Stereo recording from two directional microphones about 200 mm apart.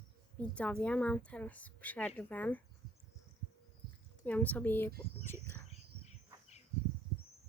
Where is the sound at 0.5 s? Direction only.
5° left (ahead or behind).